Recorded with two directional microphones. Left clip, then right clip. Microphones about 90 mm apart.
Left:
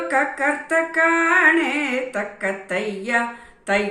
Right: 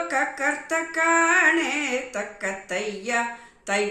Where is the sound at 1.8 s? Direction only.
20° right (ahead or behind).